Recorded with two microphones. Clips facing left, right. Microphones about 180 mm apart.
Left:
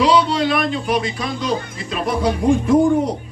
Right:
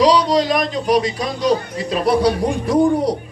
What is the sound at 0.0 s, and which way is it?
Speech, 40° right (ahead or behind).